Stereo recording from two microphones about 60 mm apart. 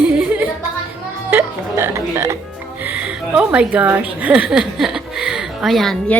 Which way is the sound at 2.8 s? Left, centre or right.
Right.